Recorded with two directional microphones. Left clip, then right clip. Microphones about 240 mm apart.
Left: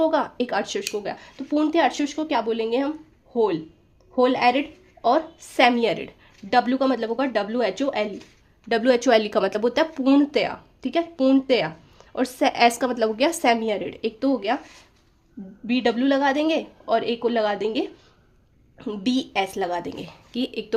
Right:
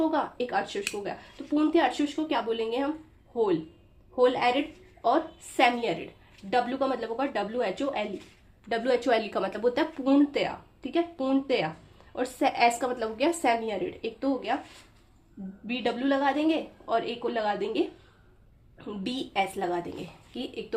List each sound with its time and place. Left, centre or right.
0.0 s a woman's voice: left
15.6 s a woman's voice: left
18.9 s a woman's voice: left